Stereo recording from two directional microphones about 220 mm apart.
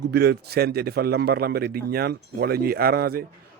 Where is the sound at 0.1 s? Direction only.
45° right (ahead or behind).